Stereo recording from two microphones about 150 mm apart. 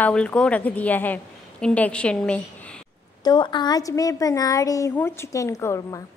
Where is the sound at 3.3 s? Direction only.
30° left (ahead or behind).